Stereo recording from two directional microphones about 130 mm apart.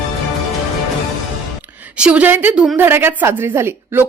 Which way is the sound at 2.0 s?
10° right (ahead or behind).